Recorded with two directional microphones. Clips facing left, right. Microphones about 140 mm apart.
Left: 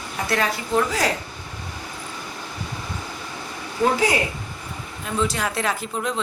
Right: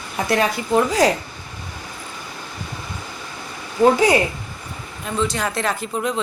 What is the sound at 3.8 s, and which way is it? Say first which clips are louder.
Speech: right 6 dB; 25° right (ahead or behind).